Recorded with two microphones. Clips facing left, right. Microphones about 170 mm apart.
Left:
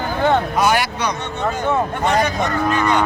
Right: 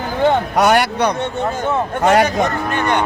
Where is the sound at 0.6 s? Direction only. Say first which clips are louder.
Right 4 dB; 65° right (ahead or behind).